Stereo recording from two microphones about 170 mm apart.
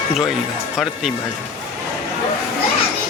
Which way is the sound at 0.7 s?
5° right (ahead or behind).